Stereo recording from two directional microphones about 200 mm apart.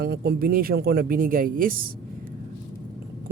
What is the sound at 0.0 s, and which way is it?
Speech, 55° right (ahead or behind).